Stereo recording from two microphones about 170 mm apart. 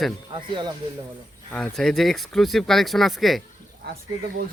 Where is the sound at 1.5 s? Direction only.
5° left (ahead or behind).